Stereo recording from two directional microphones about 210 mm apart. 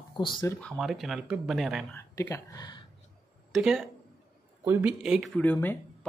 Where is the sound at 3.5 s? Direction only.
Centre (ahead or behind).